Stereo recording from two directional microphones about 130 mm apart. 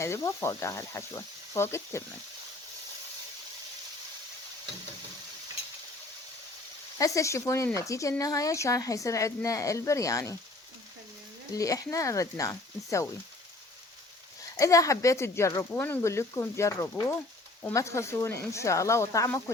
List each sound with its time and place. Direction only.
0.0 s a woman's voice: 20° left (ahead or behind)
7.0 s a woman's voice: 25° left (ahead or behind)
11.5 s a woman's voice: 25° left (ahead or behind)
14.5 s a woman's voice: 25° left (ahead or behind)